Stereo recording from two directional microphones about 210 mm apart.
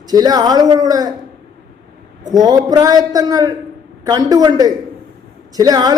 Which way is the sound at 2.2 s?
20° right (ahead or behind).